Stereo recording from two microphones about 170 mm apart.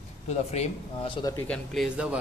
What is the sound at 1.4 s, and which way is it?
Speech, 5° left (ahead or behind).